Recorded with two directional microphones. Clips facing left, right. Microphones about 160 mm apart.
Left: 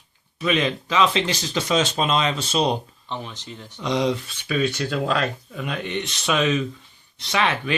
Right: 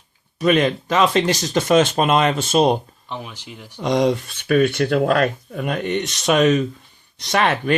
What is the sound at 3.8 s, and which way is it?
Speech, 50° right (ahead or behind).